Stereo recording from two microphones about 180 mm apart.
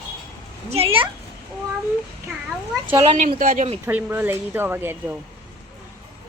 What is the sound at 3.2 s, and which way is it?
Speech, 50° right (ahead or behind).